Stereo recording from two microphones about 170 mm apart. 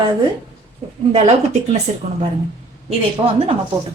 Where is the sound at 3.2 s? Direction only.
30° right (ahead or behind).